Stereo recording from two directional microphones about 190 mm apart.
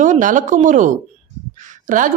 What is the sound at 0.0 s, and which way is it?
Speech, 40° right (ahead or behind).